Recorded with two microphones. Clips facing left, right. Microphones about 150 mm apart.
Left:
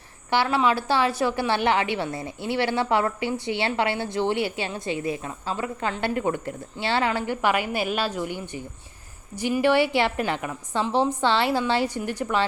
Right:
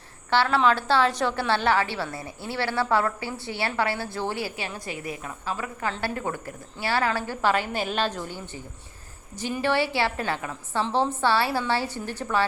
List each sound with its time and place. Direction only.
0.3 s a woman's voice: 10° left (ahead or behind)